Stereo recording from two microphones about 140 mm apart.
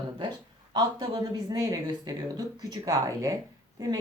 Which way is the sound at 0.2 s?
30° right (ahead or behind).